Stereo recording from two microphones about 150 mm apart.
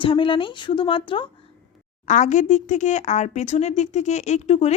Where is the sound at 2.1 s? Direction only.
55° left (ahead or behind).